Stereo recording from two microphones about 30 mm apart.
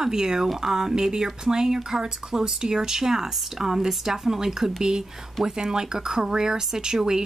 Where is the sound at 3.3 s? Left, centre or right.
Centre.